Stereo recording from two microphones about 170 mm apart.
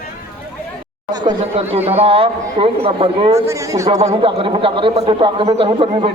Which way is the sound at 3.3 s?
15° right (ahead or behind).